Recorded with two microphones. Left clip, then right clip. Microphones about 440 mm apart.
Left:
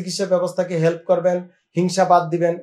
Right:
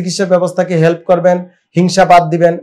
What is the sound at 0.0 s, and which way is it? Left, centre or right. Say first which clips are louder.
Speech: right 8 dB; right.